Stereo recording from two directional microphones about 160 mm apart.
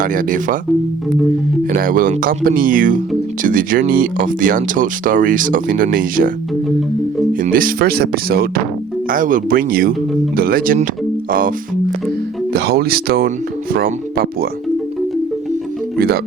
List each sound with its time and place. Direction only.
0.0 s speech: 60° right (ahead or behind)
1.7 s speech: 60° right (ahead or behind)
7.4 s speech: 60° right (ahead or behind)
9.0 s speech: 60° right (ahead or behind)
12.5 s speech: 75° right (ahead or behind)
16.0 s speech: 75° right (ahead or behind)